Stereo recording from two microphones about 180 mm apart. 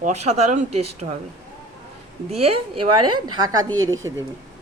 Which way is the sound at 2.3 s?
35° right (ahead or behind).